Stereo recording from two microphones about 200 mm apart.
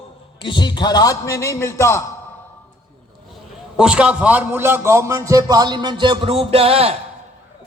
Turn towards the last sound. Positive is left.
turn(degrees=-30)  # may be behind; listen again after turning